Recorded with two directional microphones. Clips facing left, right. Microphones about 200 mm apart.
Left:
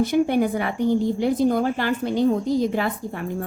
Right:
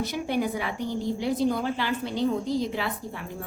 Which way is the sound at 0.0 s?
50° left (ahead or behind).